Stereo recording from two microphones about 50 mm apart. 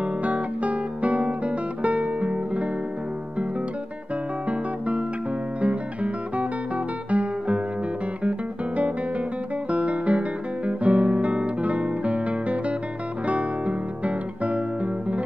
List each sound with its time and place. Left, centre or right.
0.0 s guitar: right
4.5 s music: right
8.2 s guitar: right
13.3 s music: right